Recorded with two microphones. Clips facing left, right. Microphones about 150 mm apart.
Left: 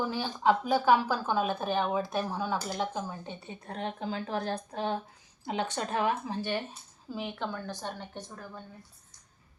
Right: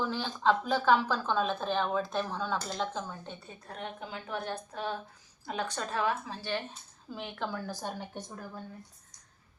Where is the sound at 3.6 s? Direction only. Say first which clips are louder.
Left 6 dB; 30° left (ahead or behind).